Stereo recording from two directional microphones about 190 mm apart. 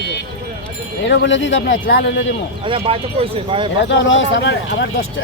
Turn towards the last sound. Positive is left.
turn(degrees=65)  # may be behind; listen again after turning